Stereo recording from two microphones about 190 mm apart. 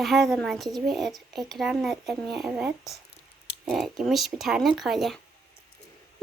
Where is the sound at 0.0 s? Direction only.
Centre (ahead or behind).